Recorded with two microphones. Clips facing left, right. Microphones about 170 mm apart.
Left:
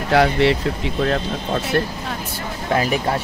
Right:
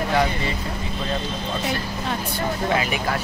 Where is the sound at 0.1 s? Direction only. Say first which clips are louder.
Left 11 dB; 80° left.